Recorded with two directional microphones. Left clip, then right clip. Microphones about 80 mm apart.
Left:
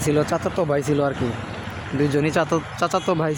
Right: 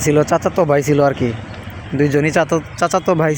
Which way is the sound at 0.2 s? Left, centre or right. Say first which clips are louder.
Right 7 dB; right.